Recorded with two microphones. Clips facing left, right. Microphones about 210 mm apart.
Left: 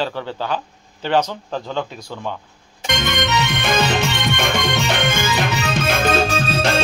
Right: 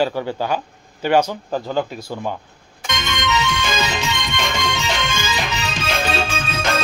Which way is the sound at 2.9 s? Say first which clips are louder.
Left 2 dB; 60° left (ahead or behind).